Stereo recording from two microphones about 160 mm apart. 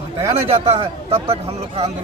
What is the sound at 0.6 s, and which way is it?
A man's voice, 40° right (ahead or behind).